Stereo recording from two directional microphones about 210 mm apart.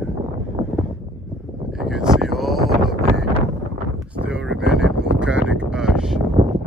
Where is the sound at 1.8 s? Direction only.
Centre (ahead or behind).